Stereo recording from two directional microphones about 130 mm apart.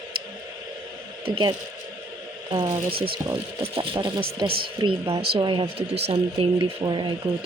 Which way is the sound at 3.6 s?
45° right (ahead or behind).